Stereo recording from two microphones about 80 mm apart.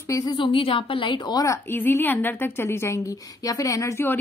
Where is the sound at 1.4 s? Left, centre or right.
Left.